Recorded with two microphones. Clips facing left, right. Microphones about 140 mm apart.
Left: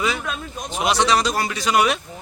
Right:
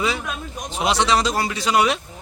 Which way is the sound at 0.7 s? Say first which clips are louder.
Even; 25° right (ahead or behind).